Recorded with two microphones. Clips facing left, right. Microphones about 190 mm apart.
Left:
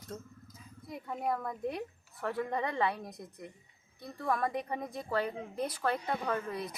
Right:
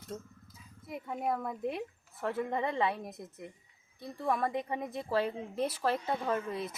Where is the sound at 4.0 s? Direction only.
25° right (ahead or behind).